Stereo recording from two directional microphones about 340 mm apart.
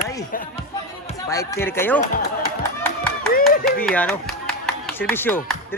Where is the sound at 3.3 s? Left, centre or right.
Left.